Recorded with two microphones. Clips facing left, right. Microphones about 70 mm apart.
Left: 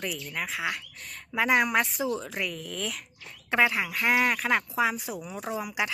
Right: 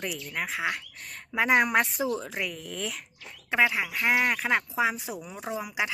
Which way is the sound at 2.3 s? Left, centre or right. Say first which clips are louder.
Even; centre.